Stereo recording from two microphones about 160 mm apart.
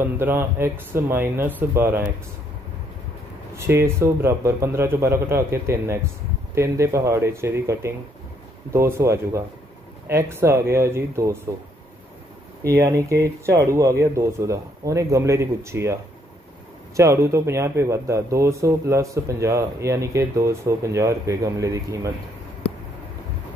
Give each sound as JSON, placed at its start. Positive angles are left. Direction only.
{"t": 0.0, "sound": "a man's voice", "side_deg": -15}
{"t": 3.5, "sound": "a man's voice", "side_deg": -15}
{"t": 12.7, "sound": "a man's voice", "side_deg": -20}